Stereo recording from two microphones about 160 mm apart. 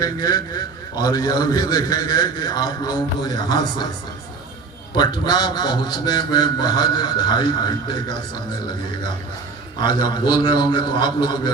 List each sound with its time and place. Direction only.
0.0 s a man's voice: 25° left (ahead or behind)
4.9 s a man's voice: 25° left (ahead or behind)
9.8 s a man's voice: 25° left (ahead or behind)